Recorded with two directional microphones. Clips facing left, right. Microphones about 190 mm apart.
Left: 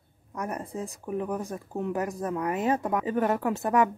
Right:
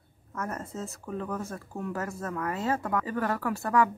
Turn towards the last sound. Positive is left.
turn(degrees=20)  # may be behind; listen again after turning